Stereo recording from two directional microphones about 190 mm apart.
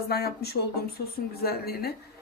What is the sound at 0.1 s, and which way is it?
Speech, 55° left (ahead or behind).